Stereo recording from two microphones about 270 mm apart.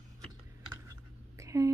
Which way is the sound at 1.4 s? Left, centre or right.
Centre.